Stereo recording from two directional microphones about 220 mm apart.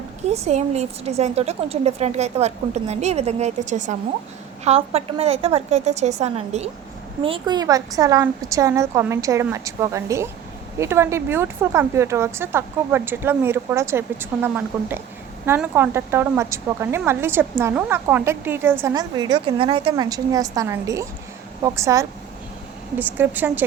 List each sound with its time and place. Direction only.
0.3 s a woman's voice: 30° right (ahead or behind); by 23.6 s 10° right (ahead or behind)